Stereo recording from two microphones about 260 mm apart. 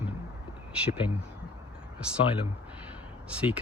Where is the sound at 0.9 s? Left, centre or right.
Centre.